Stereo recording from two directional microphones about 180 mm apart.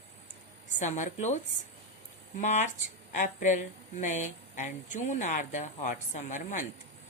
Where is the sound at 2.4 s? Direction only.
40° left (ahead or behind).